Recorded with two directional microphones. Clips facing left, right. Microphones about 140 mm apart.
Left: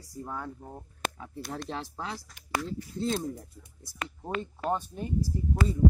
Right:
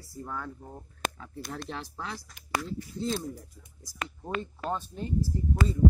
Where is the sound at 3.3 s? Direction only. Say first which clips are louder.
Left 2 dB; 25° left (ahead or behind).